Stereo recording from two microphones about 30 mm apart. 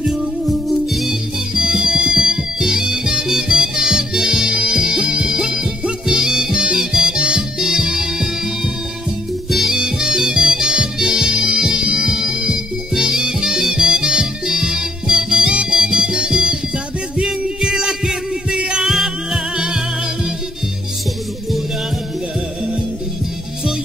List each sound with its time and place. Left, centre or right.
0.5 s music: centre
1.5 s music: centre
5.2 s music: centre
9.5 s music: centre
9.8 s music: right
12.1 s music: right
18.9 s music: centre
19.5 s music: right